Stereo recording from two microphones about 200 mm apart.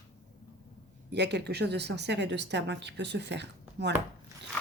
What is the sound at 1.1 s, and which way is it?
Speech, 55° right (ahead or behind).